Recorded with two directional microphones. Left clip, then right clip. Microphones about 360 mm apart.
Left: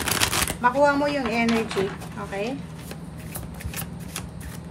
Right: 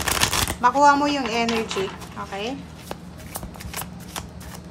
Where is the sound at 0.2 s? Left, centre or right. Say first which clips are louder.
Right 2 dB; centre.